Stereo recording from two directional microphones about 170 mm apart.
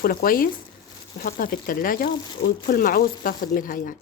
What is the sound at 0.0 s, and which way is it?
Speech, 60° left (ahead or behind).